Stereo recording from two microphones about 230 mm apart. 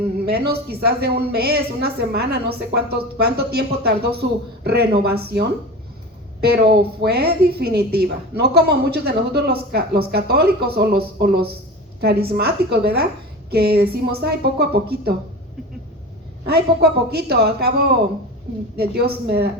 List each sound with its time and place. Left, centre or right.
0.3 s a woman's voice: right
7.0 s a woman's voice: right
16.5 s a woman's voice: right